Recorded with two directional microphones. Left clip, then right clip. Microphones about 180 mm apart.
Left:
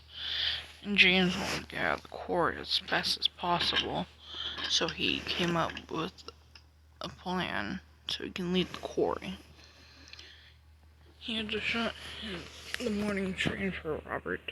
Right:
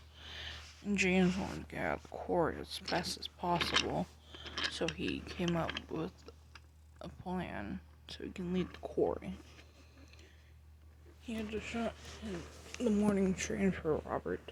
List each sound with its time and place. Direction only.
0.2 s speech: 5° right (ahead or behind)
11.3 s speech: 5° right (ahead or behind)
13.1 s speech: 25° right (ahead or behind)
13.8 s speech: 5° right (ahead or behind)